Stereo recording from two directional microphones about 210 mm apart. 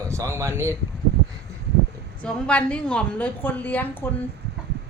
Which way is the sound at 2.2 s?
5° left (ahead or behind).